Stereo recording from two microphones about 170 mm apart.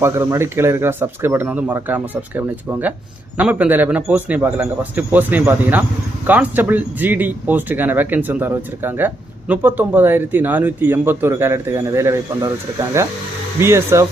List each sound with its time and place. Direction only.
0.0 s speech: 15° right (ahead or behind)